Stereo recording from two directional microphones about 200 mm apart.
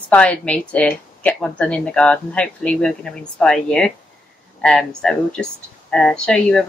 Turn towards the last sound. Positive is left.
turn(degrees=5)  # may be behind; listen again after turning